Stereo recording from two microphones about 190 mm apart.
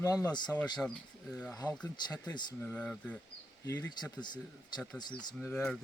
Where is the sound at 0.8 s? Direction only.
5° left (ahead or behind).